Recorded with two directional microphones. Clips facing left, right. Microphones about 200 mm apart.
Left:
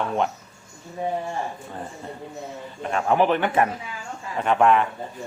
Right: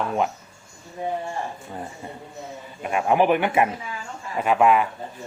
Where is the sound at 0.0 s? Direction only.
5° right (ahead or behind).